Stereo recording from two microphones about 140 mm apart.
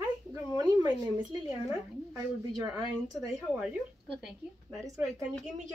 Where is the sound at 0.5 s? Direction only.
30° right (ahead or behind).